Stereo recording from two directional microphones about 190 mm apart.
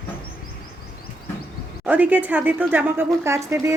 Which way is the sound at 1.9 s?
10° right (ahead or behind).